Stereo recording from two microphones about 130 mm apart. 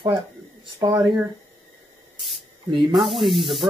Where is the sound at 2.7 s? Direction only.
35° right (ahead or behind).